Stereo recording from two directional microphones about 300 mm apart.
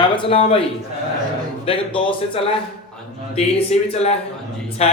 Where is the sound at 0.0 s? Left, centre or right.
Centre.